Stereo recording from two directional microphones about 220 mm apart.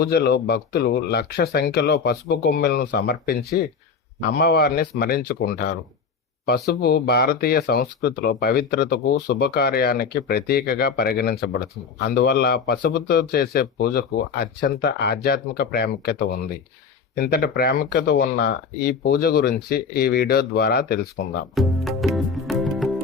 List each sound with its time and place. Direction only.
0.0 s speech: 45° left (ahead or behind)
21.5 s music: centre (ahead or behind)